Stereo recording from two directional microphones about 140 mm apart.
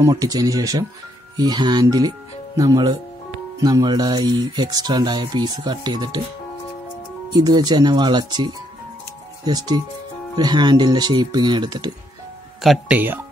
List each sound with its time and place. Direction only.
0.0 s speech: 25° right (ahead or behind)
7.3 s speech: 30° right (ahead or behind)
12.6 s speech: 5° right (ahead or behind)